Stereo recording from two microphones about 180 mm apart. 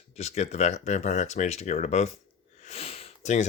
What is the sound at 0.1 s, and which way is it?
Speech, 35° left (ahead or behind).